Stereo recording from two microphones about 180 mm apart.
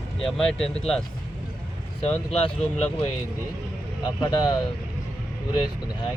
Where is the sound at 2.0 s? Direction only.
35° left (ahead or behind).